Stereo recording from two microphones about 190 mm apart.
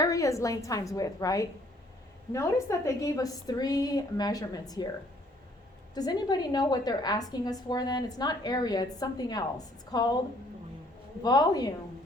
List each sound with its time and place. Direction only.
0.0 s a woman's voice: 15° left (ahead or behind)
5.9 s a woman's voice: 20° left (ahead or behind)
11.2 s a woman's voice: 20° left (ahead or behind)